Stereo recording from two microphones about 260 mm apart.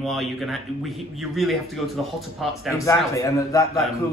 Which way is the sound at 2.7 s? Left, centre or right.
Centre.